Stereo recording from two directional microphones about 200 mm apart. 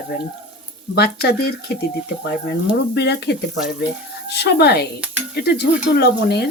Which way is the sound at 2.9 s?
55° left (ahead or behind).